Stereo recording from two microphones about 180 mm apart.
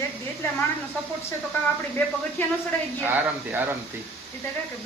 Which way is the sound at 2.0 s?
10° left (ahead or behind).